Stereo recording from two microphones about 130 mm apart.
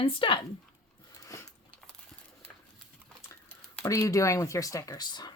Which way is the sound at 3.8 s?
25° left (ahead or behind).